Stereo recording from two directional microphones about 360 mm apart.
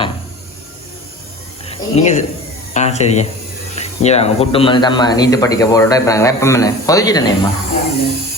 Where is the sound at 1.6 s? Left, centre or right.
Centre.